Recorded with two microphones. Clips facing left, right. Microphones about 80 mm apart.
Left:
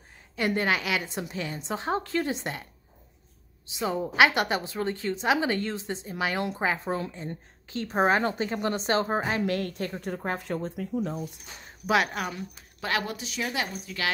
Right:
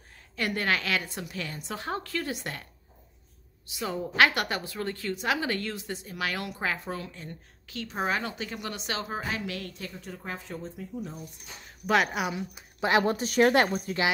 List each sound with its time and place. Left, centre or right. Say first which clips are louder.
0.4 s a woman's voice: left 2 dB; left
3.6 s a woman's voice: left 4 dB; left
9.6 s a woman's voice: left 8 dB; left
11.9 s a woman's voice: even; centre
12.8 s a woman's voice: right 6 dB; right
13.1 s speech: right 10 dB; right